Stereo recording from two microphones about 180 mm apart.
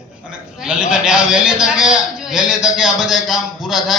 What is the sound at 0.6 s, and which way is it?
A man's voice, 5° right (ahead or behind).